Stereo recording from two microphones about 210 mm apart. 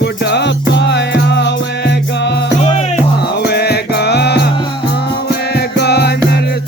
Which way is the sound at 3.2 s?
50° left (ahead or behind).